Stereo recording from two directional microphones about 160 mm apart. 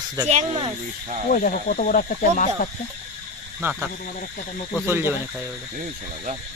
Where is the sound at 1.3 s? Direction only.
55° left (ahead or behind).